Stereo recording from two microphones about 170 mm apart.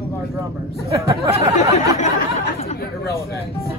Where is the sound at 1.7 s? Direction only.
45° left (ahead or behind).